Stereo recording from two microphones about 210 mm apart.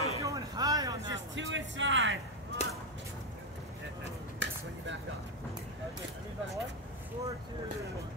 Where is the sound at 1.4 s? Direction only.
60° right (ahead or behind).